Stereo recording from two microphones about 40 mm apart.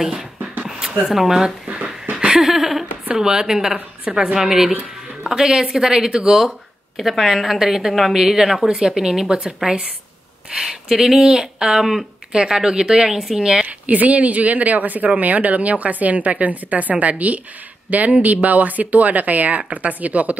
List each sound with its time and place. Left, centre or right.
0.0 s speech: centre
2.1 s laughter: right
2.4 s a sound: centre
3.2 s speech: centre
7.0 s a woman's voice: centre
8.6 s speech: centre
11.8 s speech: centre
12.3 s speech: centre
13.7 s speech: right